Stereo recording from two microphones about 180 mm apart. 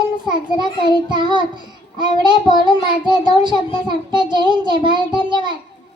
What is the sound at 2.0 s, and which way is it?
A child's voice, 25° right (ahead or behind).